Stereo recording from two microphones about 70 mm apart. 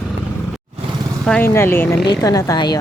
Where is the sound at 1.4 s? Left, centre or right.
Left.